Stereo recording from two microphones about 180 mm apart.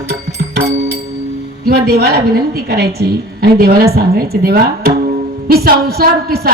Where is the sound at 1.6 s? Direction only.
60° right (ahead or behind).